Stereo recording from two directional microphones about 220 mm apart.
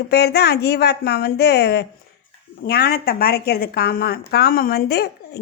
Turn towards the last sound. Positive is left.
turn(degrees=45)  # may be behind; listen again after turning